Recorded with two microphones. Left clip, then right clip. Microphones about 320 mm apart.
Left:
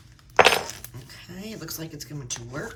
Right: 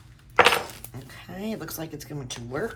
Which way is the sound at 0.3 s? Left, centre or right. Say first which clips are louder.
Left 1 dB; left.